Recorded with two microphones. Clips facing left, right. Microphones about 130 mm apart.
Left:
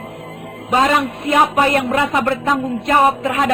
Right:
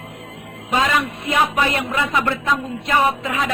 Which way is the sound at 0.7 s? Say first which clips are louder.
Left 4 dB; 35° left (ahead or behind).